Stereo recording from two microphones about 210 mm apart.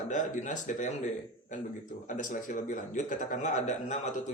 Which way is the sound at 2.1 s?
40° left (ahead or behind).